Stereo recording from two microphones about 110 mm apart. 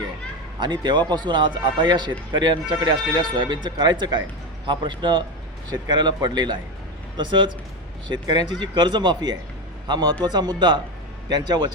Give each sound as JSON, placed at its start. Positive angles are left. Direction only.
{"t": 0.6, "sound": "a man's voice", "side_deg": -40}